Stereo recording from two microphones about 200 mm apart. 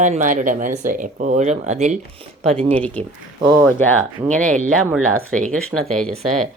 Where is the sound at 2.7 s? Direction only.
5° left (ahead or behind).